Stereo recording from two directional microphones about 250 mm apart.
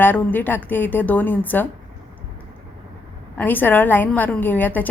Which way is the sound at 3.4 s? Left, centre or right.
Centre.